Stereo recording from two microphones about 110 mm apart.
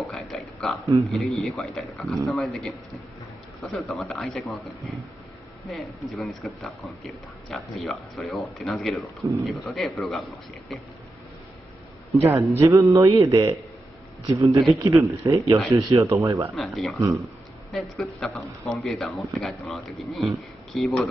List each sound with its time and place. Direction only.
0.0 s a sound: centre (ahead or behind)
1.0 s speech: centre (ahead or behind)
12.3 s music: 25° right (ahead or behind)
16.5 s speech: centre (ahead or behind)
17.0 s music: 30° right (ahead or behind)
17.7 s speech: centre (ahead or behind)